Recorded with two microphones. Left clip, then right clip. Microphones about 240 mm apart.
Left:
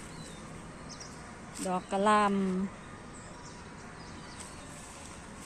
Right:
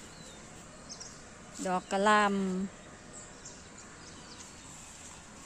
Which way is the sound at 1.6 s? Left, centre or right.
Right.